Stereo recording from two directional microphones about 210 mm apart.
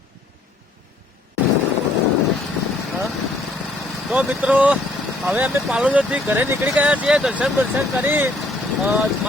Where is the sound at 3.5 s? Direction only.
5° right (ahead or behind).